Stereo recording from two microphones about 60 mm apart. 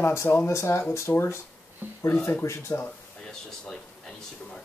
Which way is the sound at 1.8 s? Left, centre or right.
Right.